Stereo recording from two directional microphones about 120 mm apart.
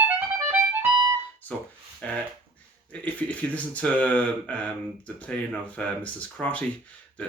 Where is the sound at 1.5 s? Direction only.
15° left (ahead or behind).